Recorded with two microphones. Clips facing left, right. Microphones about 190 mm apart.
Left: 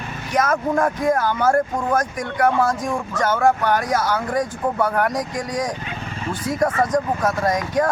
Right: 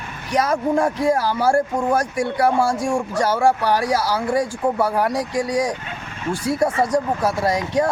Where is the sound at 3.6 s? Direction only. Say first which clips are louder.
Right 1 dB; 35° right (ahead or behind).